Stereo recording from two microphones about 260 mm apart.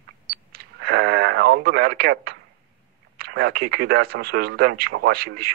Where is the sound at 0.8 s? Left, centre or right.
Right.